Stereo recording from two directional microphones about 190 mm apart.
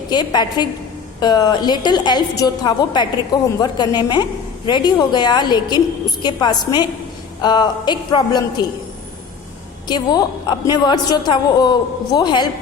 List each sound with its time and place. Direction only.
0.1 s a woman's voice: 20° left (ahead or behind)
9.8 s a woman's voice: 20° left (ahead or behind)